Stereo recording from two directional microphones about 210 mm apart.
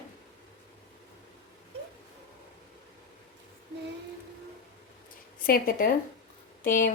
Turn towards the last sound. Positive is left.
turn(degrees=40)  # may be behind; listen again after turning